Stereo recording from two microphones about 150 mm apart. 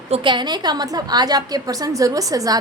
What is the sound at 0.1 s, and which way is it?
A woman's voice, 35° right (ahead or behind).